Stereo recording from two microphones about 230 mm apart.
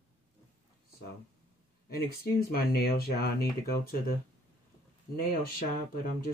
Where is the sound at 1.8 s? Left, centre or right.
Left.